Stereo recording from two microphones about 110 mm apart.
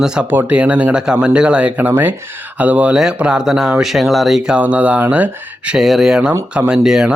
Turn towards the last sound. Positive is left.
turn(degrees=-5)  # may be behind; listen again after turning